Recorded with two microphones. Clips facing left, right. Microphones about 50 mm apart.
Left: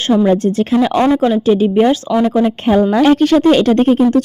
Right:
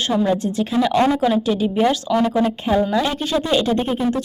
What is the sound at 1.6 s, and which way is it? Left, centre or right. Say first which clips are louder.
Speech: left 5 dB; left.